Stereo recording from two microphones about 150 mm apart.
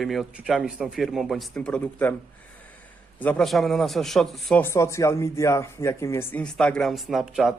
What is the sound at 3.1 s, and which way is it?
Speech, 10° left (ahead or behind).